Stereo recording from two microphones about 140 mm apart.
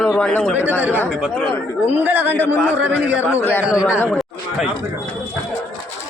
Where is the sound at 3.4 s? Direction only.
15° left (ahead or behind).